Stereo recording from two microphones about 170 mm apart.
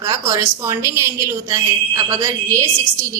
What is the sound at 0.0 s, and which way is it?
A woman's voice, 20° right (ahead or behind).